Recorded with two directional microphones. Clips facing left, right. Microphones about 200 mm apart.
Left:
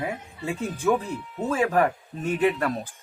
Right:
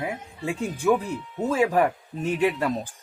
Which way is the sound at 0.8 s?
5° right (ahead or behind).